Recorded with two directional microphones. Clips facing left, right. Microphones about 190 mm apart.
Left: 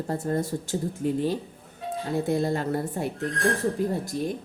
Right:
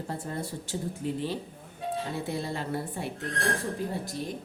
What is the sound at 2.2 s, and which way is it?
Speech, 45° left (ahead or behind).